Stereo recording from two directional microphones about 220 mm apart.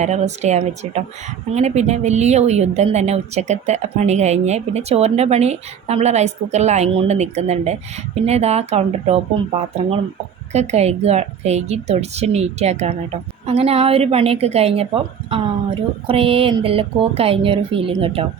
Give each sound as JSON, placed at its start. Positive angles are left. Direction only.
{"t": 0.0, "sound": "a woman's voice", "side_deg": -30}
{"t": 16.0, "sound": "a woman's voice", "side_deg": -25}